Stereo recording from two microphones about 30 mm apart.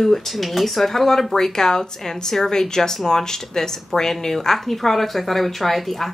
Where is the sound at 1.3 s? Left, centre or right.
Centre.